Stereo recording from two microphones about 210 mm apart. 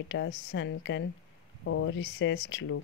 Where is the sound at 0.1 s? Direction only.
60° left (ahead or behind).